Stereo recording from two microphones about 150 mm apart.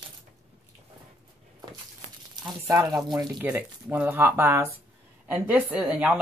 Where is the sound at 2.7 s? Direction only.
25° right (ahead or behind).